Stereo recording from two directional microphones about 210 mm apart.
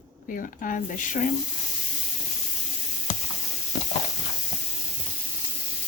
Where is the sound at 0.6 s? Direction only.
40° left (ahead or behind).